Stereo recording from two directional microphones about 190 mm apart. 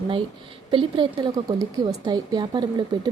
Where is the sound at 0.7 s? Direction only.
25° right (ahead or behind).